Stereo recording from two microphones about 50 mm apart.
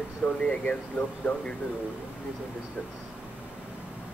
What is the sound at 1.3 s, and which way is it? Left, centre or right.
Speech, left.